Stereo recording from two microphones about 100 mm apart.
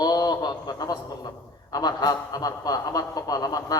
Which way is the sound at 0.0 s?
45° left (ahead or behind).